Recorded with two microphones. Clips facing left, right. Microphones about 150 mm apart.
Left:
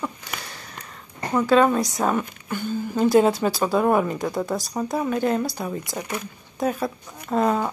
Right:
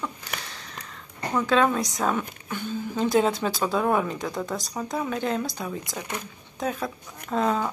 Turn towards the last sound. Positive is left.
turn(degrees=10)  # may be behind; listen again after turning